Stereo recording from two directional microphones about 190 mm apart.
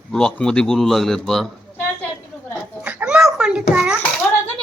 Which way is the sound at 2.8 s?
10° right (ahead or behind).